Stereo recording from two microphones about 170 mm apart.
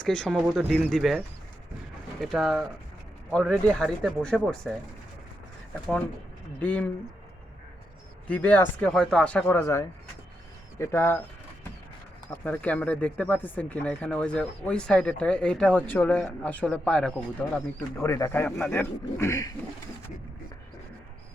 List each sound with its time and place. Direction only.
0.0 s speech: 5° left (ahead or behind)
2.2 s speech: centre (ahead or behind)
6.6 s speech: 5° left (ahead or behind)
8.3 s speech: 10° left (ahead or behind)
12.3 s speech: 10° left (ahead or behind)
18.0 s speech: 15° left (ahead or behind)